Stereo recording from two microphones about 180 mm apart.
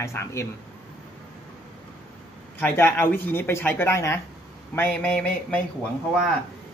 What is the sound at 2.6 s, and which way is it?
Speech, 10° left (ahead or behind).